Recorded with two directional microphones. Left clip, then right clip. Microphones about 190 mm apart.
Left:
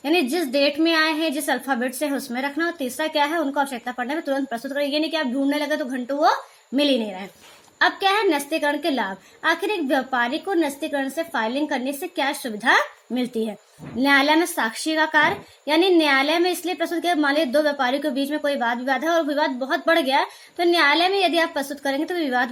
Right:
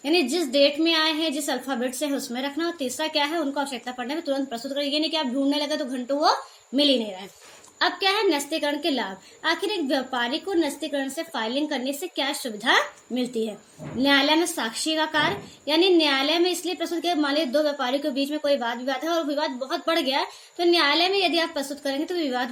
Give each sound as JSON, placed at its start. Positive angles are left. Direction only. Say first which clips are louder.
{"t": 0.0, "sound": "a woman's voice", "louder": "left 2 dB", "side_deg": 40}